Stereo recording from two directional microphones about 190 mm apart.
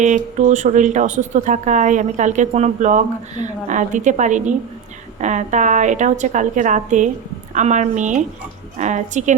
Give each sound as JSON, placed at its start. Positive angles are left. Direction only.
{"t": 0.0, "sound": "speech", "side_deg": -40}